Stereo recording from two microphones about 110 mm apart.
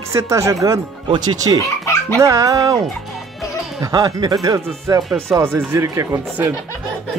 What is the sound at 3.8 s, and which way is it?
Speech, 35° right (ahead or behind).